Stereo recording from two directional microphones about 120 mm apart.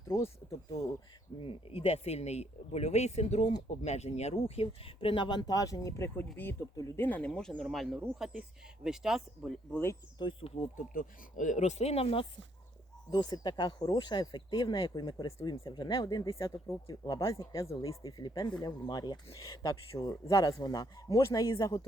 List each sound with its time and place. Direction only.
1.4 s speech: 50° left (ahead or behind); by 9.6 s centre (ahead or behind)
9.7 s speech: 20° left (ahead or behind)
10.2 s speech: 40° left (ahead or behind)
11.3 s speech: 85° left; by 12.2 s 55° left (ahead or behind)
13.1 s speech: 35° left (ahead or behind)